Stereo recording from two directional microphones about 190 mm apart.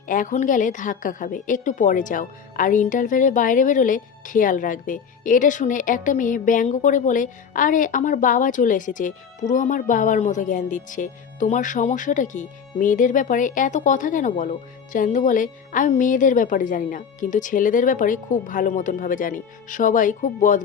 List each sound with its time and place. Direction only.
0.1 s a woman's voice: 45° left (ahead or behind)